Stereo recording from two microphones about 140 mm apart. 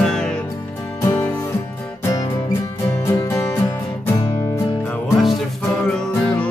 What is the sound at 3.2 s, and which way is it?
Music, 15° left (ahead or behind).